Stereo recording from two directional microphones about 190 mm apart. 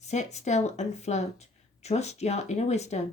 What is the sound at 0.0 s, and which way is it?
Speech, 35° left (ahead or behind).